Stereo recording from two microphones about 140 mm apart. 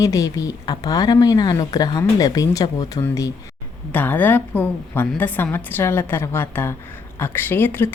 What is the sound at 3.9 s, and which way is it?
Speech, 15° left (ahead or behind).